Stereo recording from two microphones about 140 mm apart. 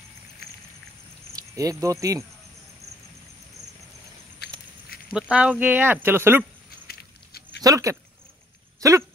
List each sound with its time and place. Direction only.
1.3 s speech: 25° right (ahead or behind)
4.8 s a sound: 90° left
5.1 s speech: 10° right (ahead or behind)
7.6 s speech: 25° right (ahead or behind)